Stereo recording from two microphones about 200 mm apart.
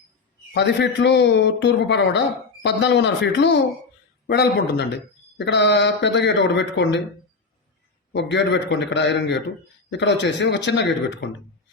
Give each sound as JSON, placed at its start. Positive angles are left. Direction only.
{"t": 0.5, "sound": "a man's voice", "side_deg": 60}
{"t": 8.1, "sound": "a man's voice", "side_deg": 60}